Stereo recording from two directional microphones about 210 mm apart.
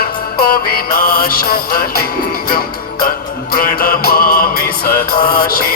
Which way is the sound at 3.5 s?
45° left (ahead or behind).